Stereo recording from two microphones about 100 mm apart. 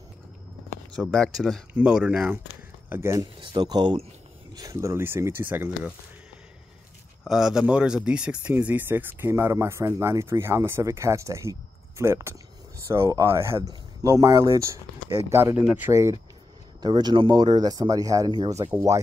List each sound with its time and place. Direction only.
0.9 s speech: 5° left (ahead or behind)
1.7 s speech: 10° right (ahead or behind)
2.9 s speech: 25° right (ahead or behind)
3.3 s speech: 45° right (ahead or behind)
4.6 s speech: 30° right (ahead or behind)
7.2 s speech: 5° right (ahead or behind); by 15.5 s 25° right (ahead or behind)
15.6 s speech: 15° right (ahead or behind)
15.9 s speech: 30° right (ahead or behind)
16.8 s speech: 45° right (ahead or behind)
18.6 s speech: 45° right (ahead or behind)